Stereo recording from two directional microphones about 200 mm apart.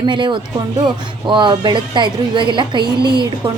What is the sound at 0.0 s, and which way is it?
Speech, 25° right (ahead or behind).